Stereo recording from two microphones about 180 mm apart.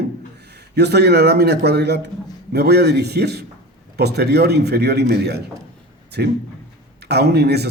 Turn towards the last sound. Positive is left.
turn(degrees=-65)  # may be behind; listen again after turning